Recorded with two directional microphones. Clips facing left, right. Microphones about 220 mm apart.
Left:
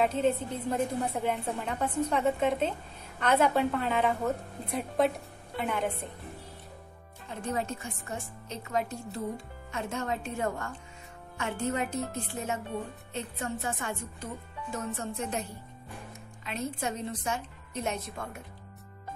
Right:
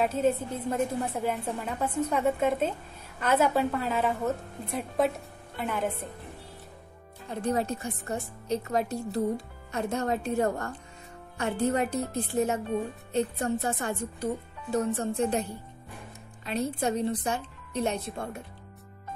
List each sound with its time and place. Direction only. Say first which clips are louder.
0.0 s a woman's voice: right 1 dB; 5° right (ahead or behind)
7.4 s speech: right 5 dB; 35° right (ahead or behind)
16.4 s speech: right 5 dB; 35° right (ahead or behind)